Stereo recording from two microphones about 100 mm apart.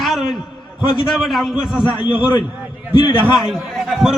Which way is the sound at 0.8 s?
60° left (ahead or behind).